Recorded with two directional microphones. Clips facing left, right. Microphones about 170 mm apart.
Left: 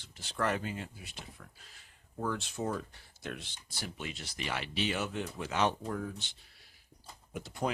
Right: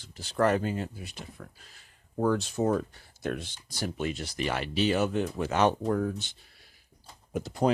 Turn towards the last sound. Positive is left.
turn(degrees=-40)  # may be behind; listen again after turning